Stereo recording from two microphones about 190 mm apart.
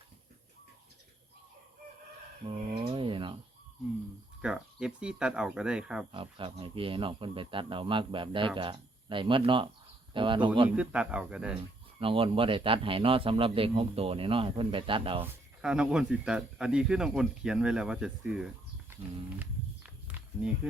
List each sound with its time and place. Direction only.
2.7 s a sound: 25° right (ahead or behind)
4.4 s speech: 5° right (ahead or behind)
6.1 s speech: 25° right (ahead or behind)
10.7 s speech: 5° right (ahead or behind)
11.9 s speech: 30° right (ahead or behind)
15.2 s speech: 5° right (ahead or behind)
20.1 s walk: 10° right (ahead or behind)